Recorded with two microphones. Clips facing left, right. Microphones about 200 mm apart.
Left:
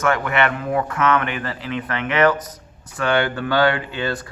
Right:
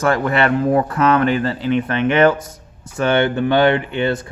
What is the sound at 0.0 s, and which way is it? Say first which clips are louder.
Speech: right 3 dB; 35° right (ahead or behind).